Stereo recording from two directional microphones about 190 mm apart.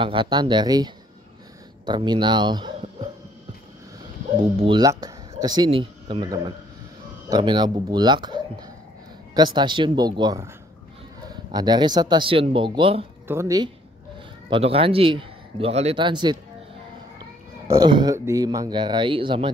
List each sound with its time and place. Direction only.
0.0 s speech: 25° right (ahead or behind)
4.4 s speech: 25° right (ahead or behind)
13.3 s speech: 15° right (ahead or behind)
14.5 s speech: 30° right (ahead or behind)